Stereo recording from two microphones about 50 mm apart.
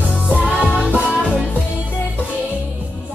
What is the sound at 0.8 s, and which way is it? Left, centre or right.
Music, left.